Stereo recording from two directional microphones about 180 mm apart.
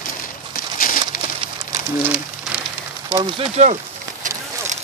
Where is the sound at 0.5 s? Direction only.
50° left (ahead or behind).